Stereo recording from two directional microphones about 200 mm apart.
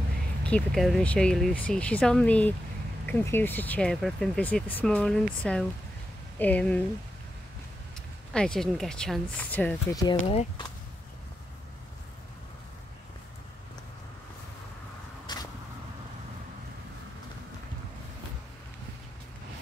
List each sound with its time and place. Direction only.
0.4 s speech: 5° left (ahead or behind)
8.3 s speech: 5° left (ahead or behind)
10.2 s speech: 25° left (ahead or behind)
15.3 s vehicle: 20° left (ahead or behind)